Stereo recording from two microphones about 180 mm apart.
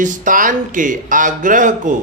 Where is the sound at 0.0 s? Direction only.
45° right (ahead or behind).